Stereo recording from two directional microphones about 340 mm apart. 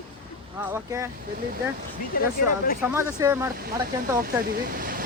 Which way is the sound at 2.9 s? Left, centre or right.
Centre.